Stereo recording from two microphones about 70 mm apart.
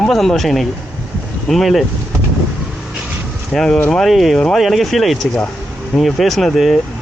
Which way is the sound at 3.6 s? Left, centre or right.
Centre.